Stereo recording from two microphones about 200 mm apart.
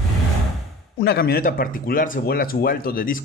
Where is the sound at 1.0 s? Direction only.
50° left (ahead or behind).